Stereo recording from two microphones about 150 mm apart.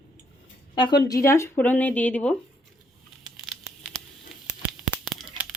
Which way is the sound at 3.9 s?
30° left (ahead or behind).